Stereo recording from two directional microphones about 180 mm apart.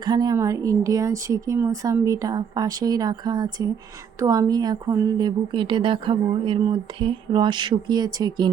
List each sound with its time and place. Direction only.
0.0 s speech: 25° right (ahead or behind)